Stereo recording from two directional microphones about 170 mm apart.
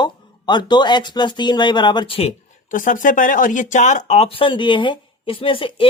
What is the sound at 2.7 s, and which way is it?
Speech, 50° left (ahead or behind).